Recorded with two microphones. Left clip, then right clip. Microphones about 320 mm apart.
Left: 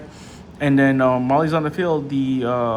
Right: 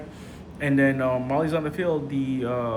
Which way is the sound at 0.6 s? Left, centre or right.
Centre.